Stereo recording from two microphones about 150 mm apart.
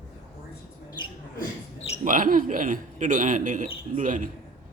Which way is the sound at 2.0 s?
60° right (ahead or behind).